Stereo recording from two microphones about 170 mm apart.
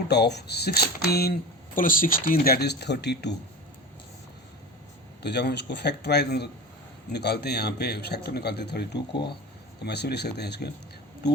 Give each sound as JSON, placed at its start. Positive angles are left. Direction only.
{"t": 0.1, "sound": "speech", "side_deg": 75}
{"t": 5.2, "sound": "speech", "side_deg": 75}